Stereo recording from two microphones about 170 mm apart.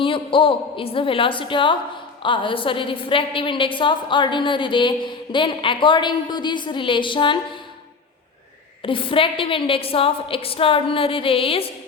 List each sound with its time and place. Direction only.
0.0 s a woman's voice: 30° left (ahead or behind)
8.8 s a woman's voice: 30° left (ahead or behind)